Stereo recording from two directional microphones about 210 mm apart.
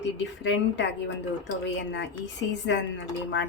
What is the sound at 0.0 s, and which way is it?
A woman's voice, 60° left (ahead or behind).